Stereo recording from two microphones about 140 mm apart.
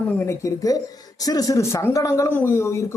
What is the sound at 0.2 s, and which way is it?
Speech, 20° left (ahead or behind).